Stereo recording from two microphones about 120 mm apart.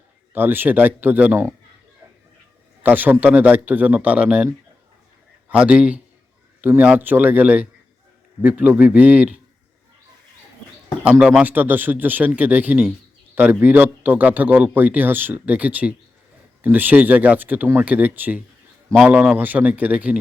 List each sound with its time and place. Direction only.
0.3 s speech: 15° right (ahead or behind)
2.8 s speech: 15° right (ahead or behind)
5.5 s speech: 10° right (ahead or behind)
11.0 s speech: 10° right (ahead or behind)